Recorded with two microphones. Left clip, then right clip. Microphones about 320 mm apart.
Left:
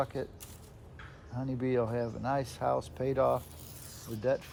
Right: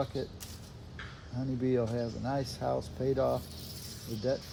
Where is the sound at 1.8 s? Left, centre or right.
Centre.